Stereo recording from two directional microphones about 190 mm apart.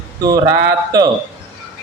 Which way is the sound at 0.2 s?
20° right (ahead or behind).